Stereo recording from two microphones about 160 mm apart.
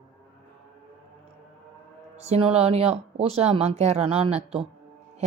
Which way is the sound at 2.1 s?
40° right (ahead or behind).